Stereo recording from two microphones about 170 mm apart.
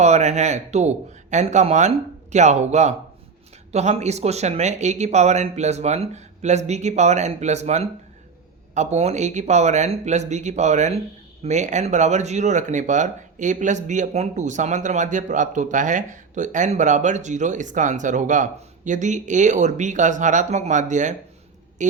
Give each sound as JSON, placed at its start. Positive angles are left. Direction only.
{"t": 0.0, "sound": "speech", "side_deg": -40}